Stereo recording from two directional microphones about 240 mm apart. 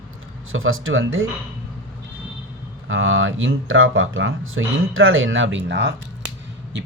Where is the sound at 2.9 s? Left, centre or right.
Right.